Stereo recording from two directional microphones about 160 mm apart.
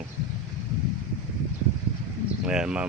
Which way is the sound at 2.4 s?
5° right (ahead or behind).